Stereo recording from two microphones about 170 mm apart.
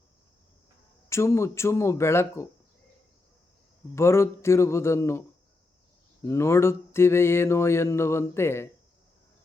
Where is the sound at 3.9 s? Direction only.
15° left (ahead or behind).